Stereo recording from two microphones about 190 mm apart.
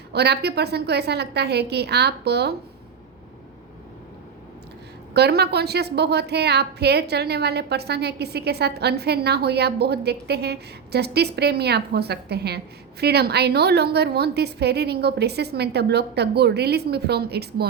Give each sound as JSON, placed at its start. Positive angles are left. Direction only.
{"t": 0.1, "sound": "a woman's voice", "side_deg": -60}
{"t": 5.1, "sound": "a woman's voice", "side_deg": -60}